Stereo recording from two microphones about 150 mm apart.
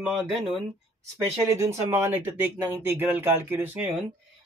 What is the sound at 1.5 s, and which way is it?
Speech, 20° right (ahead or behind).